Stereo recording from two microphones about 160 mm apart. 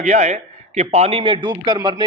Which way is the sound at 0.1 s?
45° right (ahead or behind).